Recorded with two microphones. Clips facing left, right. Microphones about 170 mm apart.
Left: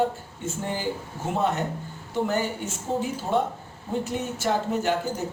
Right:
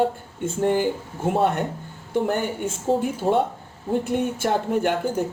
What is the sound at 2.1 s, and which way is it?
Speech, 55° right (ahead or behind).